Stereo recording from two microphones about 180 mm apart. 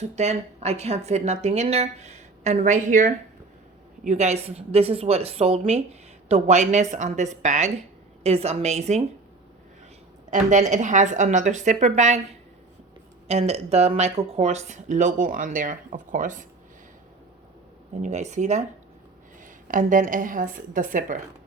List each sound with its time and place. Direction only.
0.0 s speech: 40° right (ahead or behind)
10.2 s speech: 40° right (ahead or behind)
18.0 s speech: 40° right (ahead or behind)
19.6 s a woman's voice: 45° right (ahead or behind)